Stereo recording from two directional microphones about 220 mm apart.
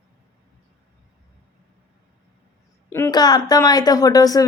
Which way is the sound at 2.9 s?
15° left (ahead or behind).